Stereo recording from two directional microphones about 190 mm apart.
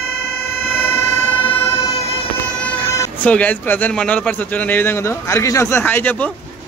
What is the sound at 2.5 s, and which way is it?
Speech, 10° left (ahead or behind).